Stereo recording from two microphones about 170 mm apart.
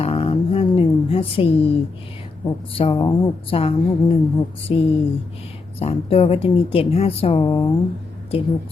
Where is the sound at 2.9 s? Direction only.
25° left (ahead or behind).